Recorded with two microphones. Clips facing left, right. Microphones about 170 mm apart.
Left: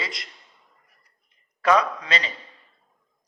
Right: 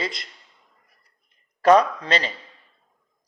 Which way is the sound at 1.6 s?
40° right (ahead or behind).